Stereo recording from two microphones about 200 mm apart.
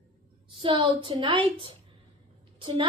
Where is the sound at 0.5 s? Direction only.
25° right (ahead or behind).